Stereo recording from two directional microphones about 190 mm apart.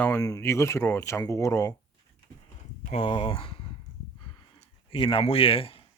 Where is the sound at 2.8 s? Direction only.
30° left (ahead or behind).